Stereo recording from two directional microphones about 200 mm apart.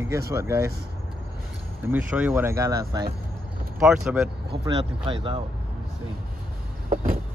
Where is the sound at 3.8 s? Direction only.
5° right (ahead or behind).